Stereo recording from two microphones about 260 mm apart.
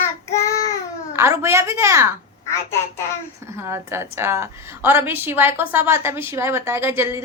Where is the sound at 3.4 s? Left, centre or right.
Centre.